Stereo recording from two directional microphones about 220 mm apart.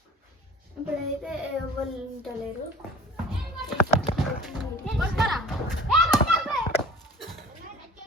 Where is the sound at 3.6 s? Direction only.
Centre (ahead or behind).